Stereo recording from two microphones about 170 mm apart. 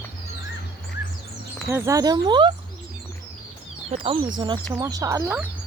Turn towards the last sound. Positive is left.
turn(degrees=-20)  # may be behind; listen again after turning